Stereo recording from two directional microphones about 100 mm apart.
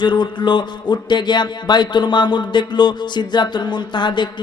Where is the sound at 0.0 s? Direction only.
50° left (ahead or behind).